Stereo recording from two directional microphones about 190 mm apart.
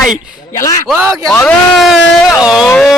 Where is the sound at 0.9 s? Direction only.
10° right (ahead or behind).